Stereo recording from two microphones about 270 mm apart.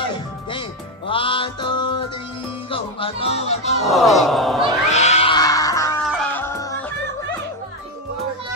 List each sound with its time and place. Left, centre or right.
0.0 s music: centre
2.7 s speech: centre
3.8 s speech: centre
4.8 s cat: left
6.1 s music: centre